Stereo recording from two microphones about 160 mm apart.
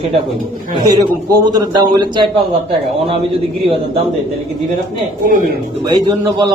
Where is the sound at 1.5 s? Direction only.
25° right (ahead or behind).